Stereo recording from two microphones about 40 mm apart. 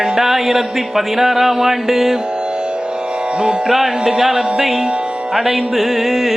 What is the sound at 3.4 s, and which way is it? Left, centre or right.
Music, centre.